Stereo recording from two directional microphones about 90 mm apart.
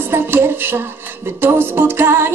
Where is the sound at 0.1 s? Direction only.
25° right (ahead or behind).